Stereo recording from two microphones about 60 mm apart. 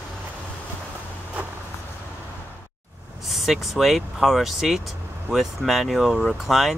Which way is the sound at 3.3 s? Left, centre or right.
Centre.